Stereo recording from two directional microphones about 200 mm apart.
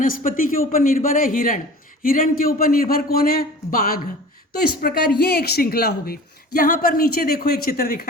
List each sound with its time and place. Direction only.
0.0 s speech: 45° left (ahead or behind)